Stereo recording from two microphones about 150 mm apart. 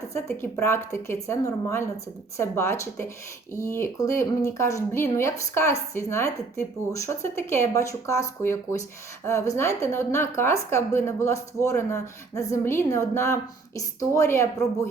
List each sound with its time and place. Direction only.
0.1 s a woman's voice: 15° left (ahead or behind)